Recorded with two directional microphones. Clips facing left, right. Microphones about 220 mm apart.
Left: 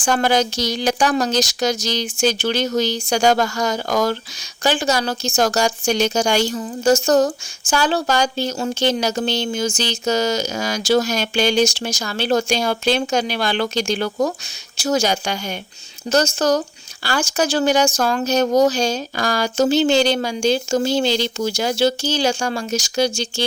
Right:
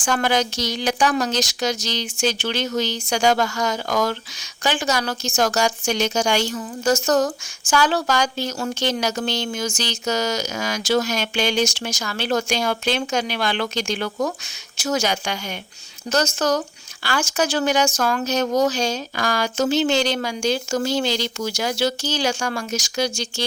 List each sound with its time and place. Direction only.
0.0 s speech: 35° left (ahead or behind)